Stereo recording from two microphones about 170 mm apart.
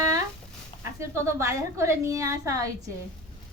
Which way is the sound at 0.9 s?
15° right (ahead or behind).